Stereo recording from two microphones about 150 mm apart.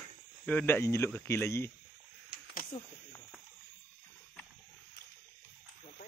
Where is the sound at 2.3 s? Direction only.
70° left (ahead or behind).